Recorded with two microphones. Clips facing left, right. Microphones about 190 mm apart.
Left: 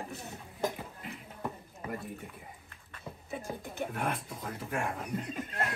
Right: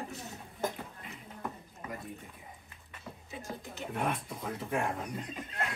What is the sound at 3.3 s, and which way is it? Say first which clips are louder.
Speech: left 4 dB; 55° left (ahead or behind).